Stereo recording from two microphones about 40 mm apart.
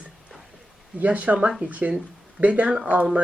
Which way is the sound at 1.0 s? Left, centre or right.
Right.